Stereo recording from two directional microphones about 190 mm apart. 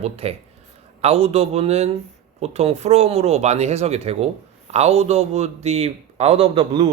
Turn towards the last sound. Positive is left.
turn(degrees=-30)  # may be behind; listen again after turning